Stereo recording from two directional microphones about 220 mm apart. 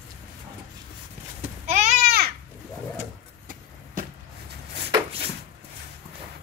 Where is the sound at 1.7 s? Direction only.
30° right (ahead or behind).